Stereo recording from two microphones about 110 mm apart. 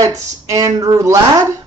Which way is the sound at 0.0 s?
30° right (ahead or behind).